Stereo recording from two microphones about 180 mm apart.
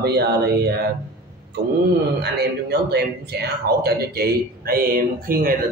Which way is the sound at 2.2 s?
60° right (ahead or behind).